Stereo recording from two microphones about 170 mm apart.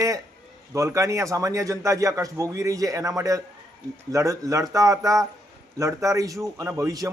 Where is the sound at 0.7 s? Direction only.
15° right (ahead or behind).